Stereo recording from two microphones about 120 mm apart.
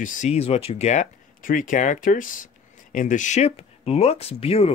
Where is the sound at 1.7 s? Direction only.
90° left.